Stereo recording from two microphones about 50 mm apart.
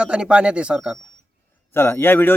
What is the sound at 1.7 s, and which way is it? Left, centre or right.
Speech, left.